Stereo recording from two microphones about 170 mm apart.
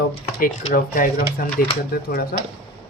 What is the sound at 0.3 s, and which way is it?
Speech, 55° left (ahead or behind).